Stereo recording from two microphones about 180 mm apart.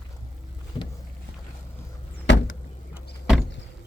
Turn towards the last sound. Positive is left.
turn(degrees=-5)  # may be behind; listen again after turning